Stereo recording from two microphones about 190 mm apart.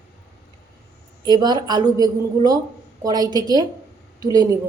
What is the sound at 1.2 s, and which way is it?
A man's voice, 20° right (ahead or behind).